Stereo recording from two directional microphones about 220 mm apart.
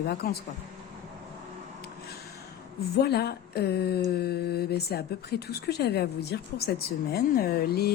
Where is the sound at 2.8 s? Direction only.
45° left (ahead or behind).